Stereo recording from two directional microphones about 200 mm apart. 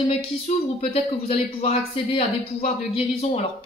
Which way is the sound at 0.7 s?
30° left (ahead or behind).